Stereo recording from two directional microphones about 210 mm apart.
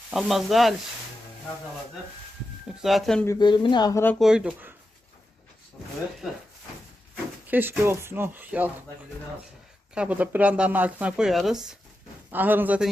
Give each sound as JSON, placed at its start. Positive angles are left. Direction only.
{"t": 0.1, "sound": "speech", "side_deg": 0}
{"t": 2.8, "sound": "speech", "side_deg": 0}
{"t": 3.2, "sound": "speech", "side_deg": 20}
{"t": 4.2, "sound": "speech", "side_deg": -5}
{"t": 7.4, "sound": "speech", "side_deg": -10}
{"t": 9.9, "sound": "speech", "side_deg": -5}